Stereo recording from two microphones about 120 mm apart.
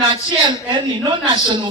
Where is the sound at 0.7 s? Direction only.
40° right (ahead or behind).